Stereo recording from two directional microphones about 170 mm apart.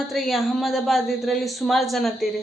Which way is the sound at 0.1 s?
Centre (ahead or behind).